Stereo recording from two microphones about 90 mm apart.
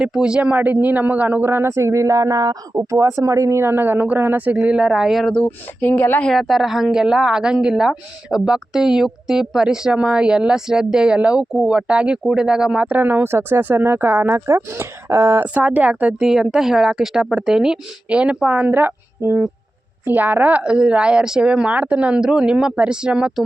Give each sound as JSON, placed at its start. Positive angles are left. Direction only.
{"t": 0.0, "sound": "speech", "side_deg": -10}
{"t": 5.4, "sound": "a woman's voice", "side_deg": 20}
{"t": 6.2, "sound": "speech", "side_deg": 0}
{"t": 14.3, "sound": "speech", "side_deg": -35}
{"t": 15.4, "sound": "speech", "side_deg": -15}